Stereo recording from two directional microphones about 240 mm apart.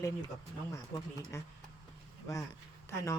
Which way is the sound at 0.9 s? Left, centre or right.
Centre.